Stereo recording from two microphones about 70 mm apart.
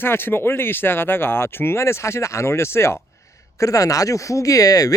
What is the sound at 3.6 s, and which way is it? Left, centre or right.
Speech, left.